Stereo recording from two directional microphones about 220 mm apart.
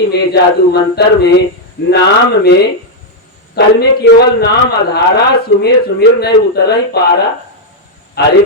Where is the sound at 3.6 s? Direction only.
50° left (ahead or behind).